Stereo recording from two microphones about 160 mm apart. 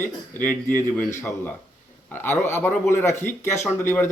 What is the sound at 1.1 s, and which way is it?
Speech, 10° left (ahead or behind).